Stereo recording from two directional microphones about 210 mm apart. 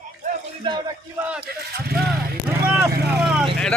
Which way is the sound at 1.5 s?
50° right (ahead or behind).